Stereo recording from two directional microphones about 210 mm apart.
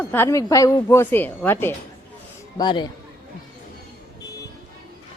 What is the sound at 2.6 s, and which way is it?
Speech, 20° left (ahead or behind).